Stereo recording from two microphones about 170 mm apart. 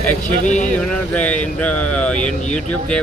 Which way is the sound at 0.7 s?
5° left (ahead or behind).